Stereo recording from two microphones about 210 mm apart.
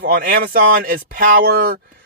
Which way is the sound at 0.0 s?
40° right (ahead or behind).